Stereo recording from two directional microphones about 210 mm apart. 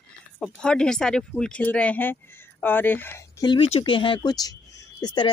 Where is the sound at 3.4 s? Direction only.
25° left (ahead or behind).